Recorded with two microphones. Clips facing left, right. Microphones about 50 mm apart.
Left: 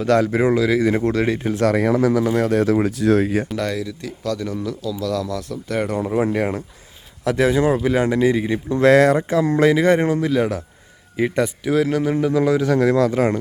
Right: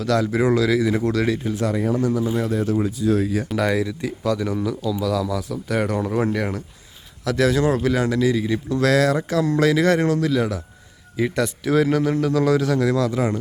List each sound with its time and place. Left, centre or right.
0.0 s speech: left
1.5 s speech: left
3.2 s speech: left
3.5 s speech: centre
6.1 s a man's voice: centre
6.3 s speech: left
11.6 s speech: centre
12.1 s a man's voice: centre
12.6 s speech: left